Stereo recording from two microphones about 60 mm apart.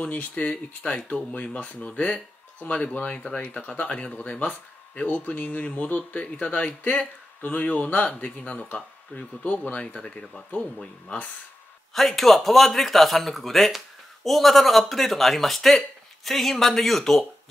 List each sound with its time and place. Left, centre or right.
0.0 s speech: left
11.9 s speech: centre